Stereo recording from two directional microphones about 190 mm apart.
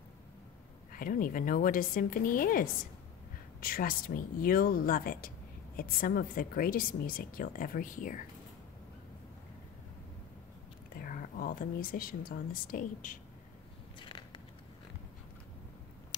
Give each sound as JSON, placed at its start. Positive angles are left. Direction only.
{"t": 0.9, "sound": "a woman's voice", "side_deg": 45}
{"t": 11.0, "sound": "speech", "side_deg": 50}
{"t": 13.9, "sound": "a sound", "side_deg": 25}